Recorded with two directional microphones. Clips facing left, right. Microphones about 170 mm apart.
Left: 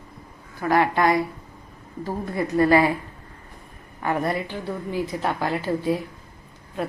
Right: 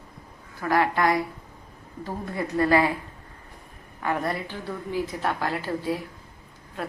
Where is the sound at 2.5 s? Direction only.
15° left (ahead or behind).